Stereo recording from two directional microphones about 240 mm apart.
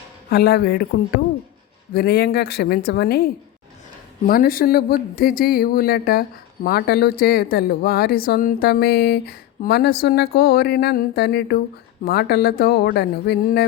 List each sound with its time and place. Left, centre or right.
0.3 s speech: left
1.9 s speech: left
4.3 s speech: left